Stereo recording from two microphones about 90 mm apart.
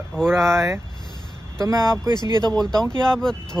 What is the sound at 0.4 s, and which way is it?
Speech, 30° right (ahead or behind).